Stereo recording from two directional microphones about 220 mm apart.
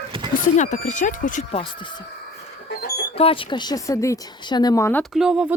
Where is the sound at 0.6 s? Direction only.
35° left (ahead or behind).